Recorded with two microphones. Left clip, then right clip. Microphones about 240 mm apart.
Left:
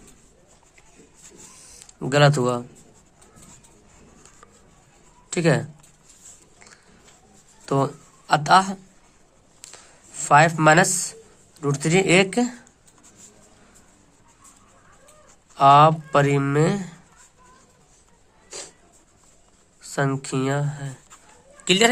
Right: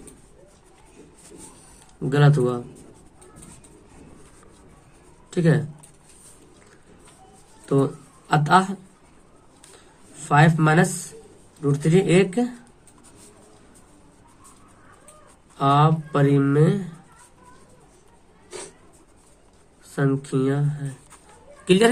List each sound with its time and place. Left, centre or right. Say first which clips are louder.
2.0 s speech: left 3 dB; left
5.3 s speech: left 2 dB; left
8.3 s speech: left 2 dB; left
10.2 s speech: left 4 dB; left
15.5 s speech: left 6 dB; left
20.0 s speech: right 1 dB; left
21.6 s a sound: even; left